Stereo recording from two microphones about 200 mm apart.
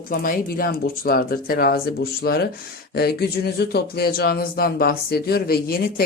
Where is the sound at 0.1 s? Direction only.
45° left (ahead or behind).